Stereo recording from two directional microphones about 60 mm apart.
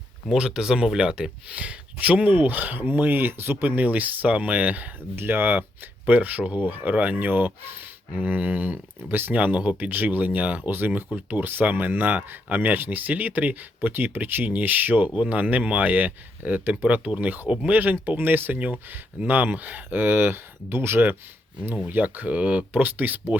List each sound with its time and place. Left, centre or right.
0.3 s speech: centre; by 23.2 s right